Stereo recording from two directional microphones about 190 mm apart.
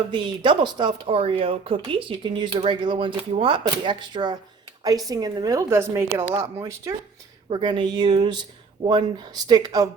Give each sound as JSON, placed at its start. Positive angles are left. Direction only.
{"t": 0.1, "sound": "speech", "side_deg": -25}
{"t": 7.5, "sound": "speech", "side_deg": -25}